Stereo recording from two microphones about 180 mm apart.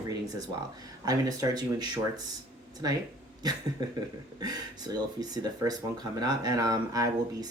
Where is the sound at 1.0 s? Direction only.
20° right (ahead or behind).